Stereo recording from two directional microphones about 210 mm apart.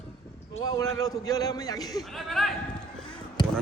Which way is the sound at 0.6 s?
15° left (ahead or behind).